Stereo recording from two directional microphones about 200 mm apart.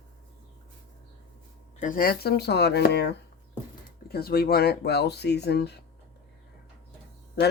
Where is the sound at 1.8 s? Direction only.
45° left (ahead or behind).